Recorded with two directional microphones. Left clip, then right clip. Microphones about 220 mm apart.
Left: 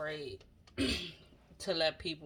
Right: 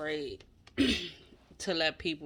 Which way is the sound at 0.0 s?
30° right (ahead or behind).